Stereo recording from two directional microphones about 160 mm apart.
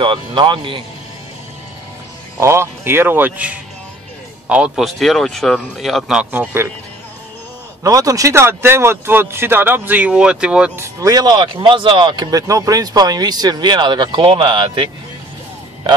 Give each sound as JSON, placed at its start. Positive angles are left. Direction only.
{"t": 0.0, "sound": "speech", "side_deg": -30}
{"t": 2.4, "sound": "speech", "side_deg": -15}
{"t": 7.8, "sound": "speech", "side_deg": -20}
{"t": 11.0, "sound": "speech", "side_deg": -20}